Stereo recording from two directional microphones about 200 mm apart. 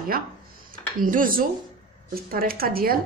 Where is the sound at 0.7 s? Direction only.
45° right (ahead or behind).